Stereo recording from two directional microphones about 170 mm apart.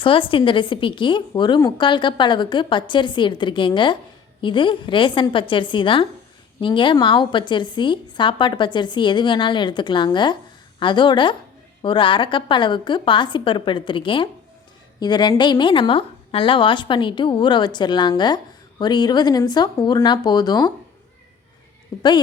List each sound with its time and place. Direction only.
0.0 s a woman's voice: 30° left (ahead or behind)